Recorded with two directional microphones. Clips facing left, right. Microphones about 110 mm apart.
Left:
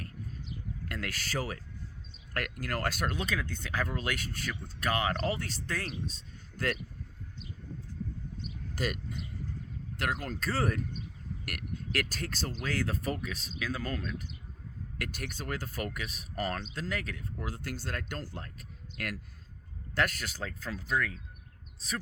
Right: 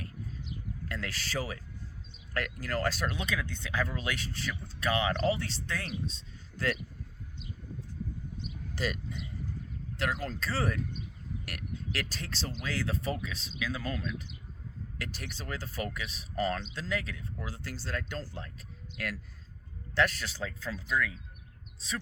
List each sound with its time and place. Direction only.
0.9 s speech: 45° left (ahead or behind)
8.7 s speech: 45° left (ahead or behind)